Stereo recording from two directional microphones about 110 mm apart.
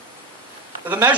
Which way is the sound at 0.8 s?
15° right (ahead or behind).